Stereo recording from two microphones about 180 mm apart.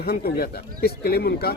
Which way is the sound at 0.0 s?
60° left (ahead or behind).